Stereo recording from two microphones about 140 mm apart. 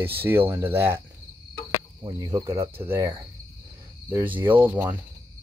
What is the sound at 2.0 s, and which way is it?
Speech, 30° right (ahead or behind).